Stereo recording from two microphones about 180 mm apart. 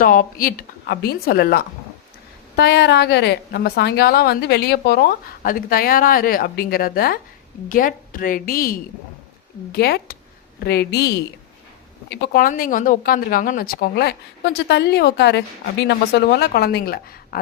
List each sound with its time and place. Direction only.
0.0 s speech: 50° left (ahead or behind)
2.6 s a woman's voice: 70° left (ahead or behind); by 8.7 s 55° left (ahead or behind)
9.7 s a woman's voice: 60° left (ahead or behind)